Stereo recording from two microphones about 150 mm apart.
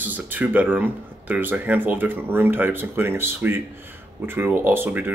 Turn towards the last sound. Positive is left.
turn(degrees=-15)  # may be behind; listen again after turning